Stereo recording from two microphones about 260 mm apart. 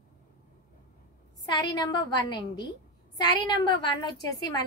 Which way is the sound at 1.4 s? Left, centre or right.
Centre.